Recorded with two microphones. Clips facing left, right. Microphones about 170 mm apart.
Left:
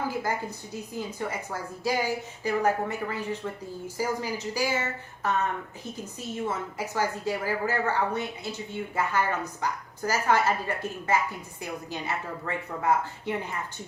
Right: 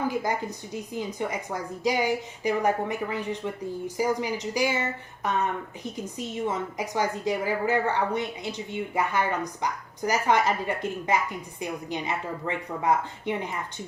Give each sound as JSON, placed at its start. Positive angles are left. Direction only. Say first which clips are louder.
{"t": 0.1, "sound": "a woman's voice", "louder": "right 2 dB", "side_deg": -15}